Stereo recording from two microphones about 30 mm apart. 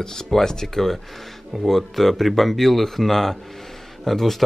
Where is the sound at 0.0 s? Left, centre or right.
Centre.